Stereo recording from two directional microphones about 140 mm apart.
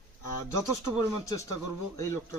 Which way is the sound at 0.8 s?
25° left (ahead or behind).